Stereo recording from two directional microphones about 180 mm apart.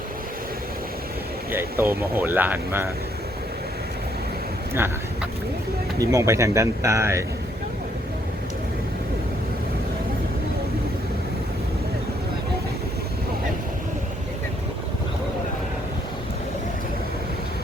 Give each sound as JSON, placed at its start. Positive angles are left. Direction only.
{"t": 1.5, "sound": "speech", "side_deg": -10}
{"t": 6.0, "sound": "speech", "side_deg": -20}